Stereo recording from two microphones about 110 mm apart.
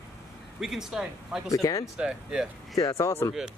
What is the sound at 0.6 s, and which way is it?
Speech, 5° right (ahead or behind).